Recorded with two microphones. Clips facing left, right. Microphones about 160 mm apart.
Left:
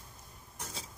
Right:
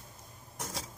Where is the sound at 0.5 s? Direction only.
75° right (ahead or behind).